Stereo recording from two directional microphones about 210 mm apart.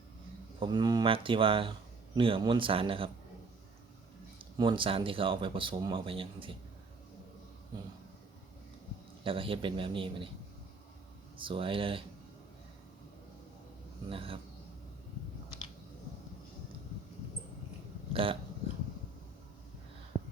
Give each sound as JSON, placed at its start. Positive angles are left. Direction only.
{"t": 0.6, "sound": "speech", "side_deg": -20}
{"t": 4.5, "sound": "speech", "side_deg": -25}
{"t": 9.2, "sound": "speech", "side_deg": -25}
{"t": 11.3, "sound": "speech", "side_deg": -25}
{"t": 14.1, "sound": "speech", "side_deg": -25}
{"t": 18.1, "sound": "speech", "side_deg": -25}